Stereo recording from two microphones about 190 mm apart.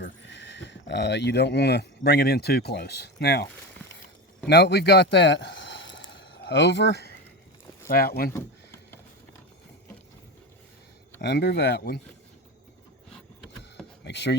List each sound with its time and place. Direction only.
0.0 s speech: 70° left (ahead or behind)
4.4 s speech: 60° left (ahead or behind)
6.1 s a sound: 65° left (ahead or behind)
7.9 s speech: 50° left (ahead or behind)
11.2 s speech: 60° left (ahead or behind)
14.0 s speech: 65° left (ahead or behind)